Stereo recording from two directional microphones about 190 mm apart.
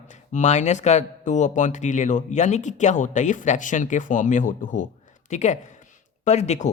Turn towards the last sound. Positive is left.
turn(degrees=35)  # may be behind; listen again after turning